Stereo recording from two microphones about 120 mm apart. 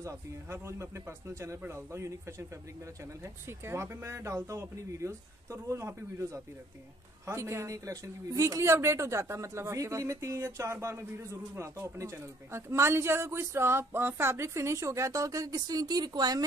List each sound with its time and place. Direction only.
0.0 s a woman's voice: 25° right (ahead or behind)
3.4 s a woman's voice: 20° right (ahead or behind)